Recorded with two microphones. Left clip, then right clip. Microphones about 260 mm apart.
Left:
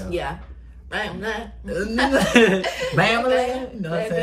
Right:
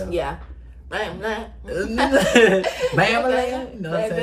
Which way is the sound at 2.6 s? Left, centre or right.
Centre.